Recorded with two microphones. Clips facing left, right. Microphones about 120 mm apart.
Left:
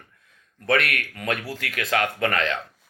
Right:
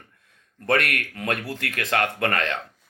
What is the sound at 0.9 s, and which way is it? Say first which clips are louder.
Speech: even; 30° right (ahead or behind).